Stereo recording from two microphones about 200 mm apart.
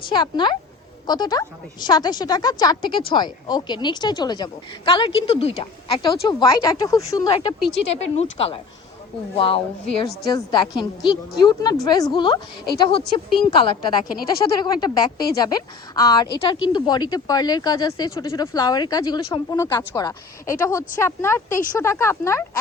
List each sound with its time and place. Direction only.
0.1 s speech: 25° left (ahead or behind)
7.9 s a woman's voice: 30° left (ahead or behind); by 22.4 s 15° left (ahead or behind)